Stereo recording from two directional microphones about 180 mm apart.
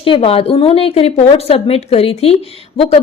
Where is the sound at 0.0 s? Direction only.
30° left (ahead or behind).